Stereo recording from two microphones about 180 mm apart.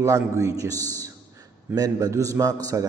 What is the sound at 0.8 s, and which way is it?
Speech, 10° left (ahead or behind).